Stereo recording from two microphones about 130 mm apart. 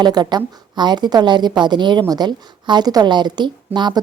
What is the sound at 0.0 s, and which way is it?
A woman's voice, 30° right (ahead or behind).